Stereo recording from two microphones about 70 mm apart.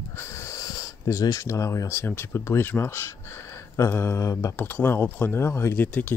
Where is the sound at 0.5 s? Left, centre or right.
Left.